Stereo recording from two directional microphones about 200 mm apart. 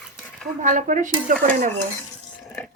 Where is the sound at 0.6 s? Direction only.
40° right (ahead or behind).